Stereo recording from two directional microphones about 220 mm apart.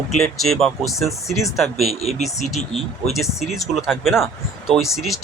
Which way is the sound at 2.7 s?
25° left (ahead or behind).